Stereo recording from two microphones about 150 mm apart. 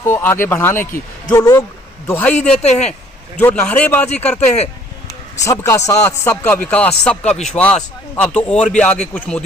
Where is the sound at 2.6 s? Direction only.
50° left (ahead or behind).